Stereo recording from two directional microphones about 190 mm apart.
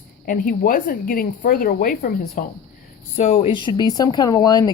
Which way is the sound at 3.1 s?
35° left (ahead or behind).